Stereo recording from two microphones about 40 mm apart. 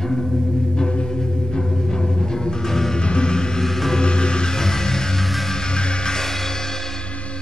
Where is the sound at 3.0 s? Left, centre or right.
Left.